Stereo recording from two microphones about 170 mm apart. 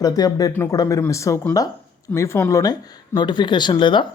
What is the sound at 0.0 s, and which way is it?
Speech, 25° left (ahead or behind).